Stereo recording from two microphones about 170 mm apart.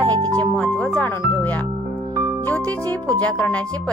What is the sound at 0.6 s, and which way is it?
Speech, 10° left (ahead or behind).